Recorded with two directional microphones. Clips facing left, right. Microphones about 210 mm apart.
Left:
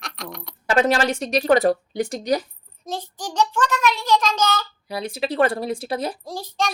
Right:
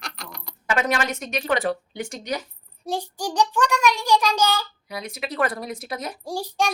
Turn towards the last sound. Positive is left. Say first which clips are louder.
# right 1 dB
turn(degrees=-15)  # may be behind; listen again after turning